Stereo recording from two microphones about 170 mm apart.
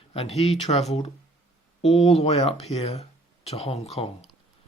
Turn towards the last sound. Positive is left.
turn(degrees=35)  # may be behind; listen again after turning